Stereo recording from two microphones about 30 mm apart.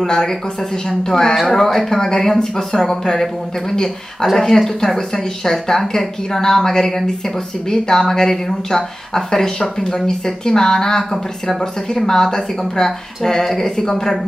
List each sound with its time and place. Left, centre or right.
0.0 s speech: centre
2.0 s a woman's voice: left